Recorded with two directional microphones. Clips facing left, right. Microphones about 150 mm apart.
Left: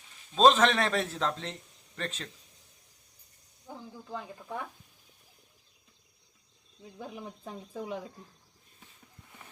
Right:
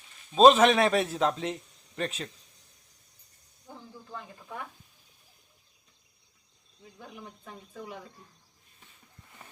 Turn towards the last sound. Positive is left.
turn(degrees=30)  # may be behind; listen again after turning